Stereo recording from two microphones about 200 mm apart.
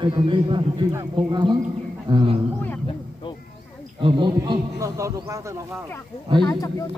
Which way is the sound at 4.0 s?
25° right (ahead or behind).